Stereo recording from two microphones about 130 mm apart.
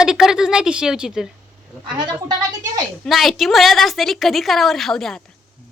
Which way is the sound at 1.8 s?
35° right (ahead or behind).